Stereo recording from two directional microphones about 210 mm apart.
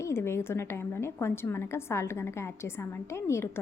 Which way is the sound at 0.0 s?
10° left (ahead or behind).